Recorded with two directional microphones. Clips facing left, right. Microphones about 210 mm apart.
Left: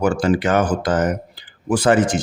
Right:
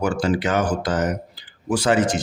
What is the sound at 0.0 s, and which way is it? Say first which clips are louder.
Speech: left 3 dB; 50° left (ahead or behind).